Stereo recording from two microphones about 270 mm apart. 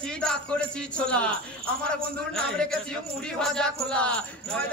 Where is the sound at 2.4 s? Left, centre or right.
Centre.